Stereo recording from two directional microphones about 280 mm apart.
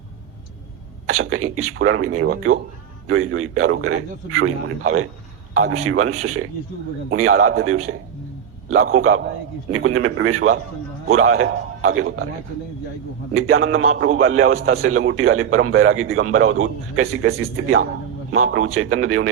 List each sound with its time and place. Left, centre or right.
1.0 s a man's voice: right
5.5 s a man's voice: right
13.3 s a man's voice: right